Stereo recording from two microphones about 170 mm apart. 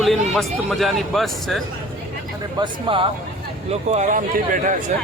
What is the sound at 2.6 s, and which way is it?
Speech, 30° right (ahead or behind).